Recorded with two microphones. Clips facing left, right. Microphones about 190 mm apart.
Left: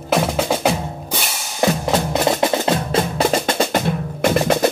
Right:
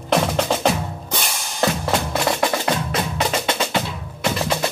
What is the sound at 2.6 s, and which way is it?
Music, 30° left (ahead or behind).